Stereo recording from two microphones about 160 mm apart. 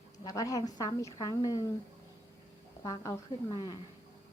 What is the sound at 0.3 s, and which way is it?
A woman's voice, 20° left (ahead or behind).